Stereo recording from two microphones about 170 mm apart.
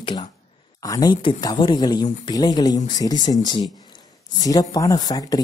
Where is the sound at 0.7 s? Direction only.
20° left (ahead or behind).